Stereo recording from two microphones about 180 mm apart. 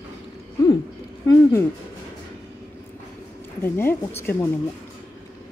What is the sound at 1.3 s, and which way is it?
Speech, 15° left (ahead or behind).